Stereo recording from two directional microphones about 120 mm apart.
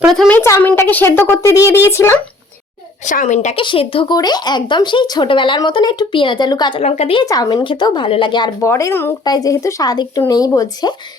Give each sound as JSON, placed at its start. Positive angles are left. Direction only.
{"t": 0.0, "sound": "a woman's voice", "side_deg": 0}
{"t": 0.3, "sound": "a woman's voice", "side_deg": 20}
{"t": 3.0, "sound": "a woman's voice", "side_deg": 90}
{"t": 3.5, "sound": "speech", "side_deg": 45}
{"t": 6.8, "sound": "a woman's voice", "side_deg": 65}
{"t": 7.2, "sound": "speech", "side_deg": 30}
{"t": 8.6, "sound": "a woman's voice", "side_deg": 20}
{"t": 9.2, "sound": "speech", "side_deg": 30}